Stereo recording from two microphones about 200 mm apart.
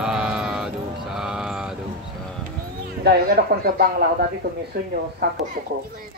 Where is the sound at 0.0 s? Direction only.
5° right (ahead or behind).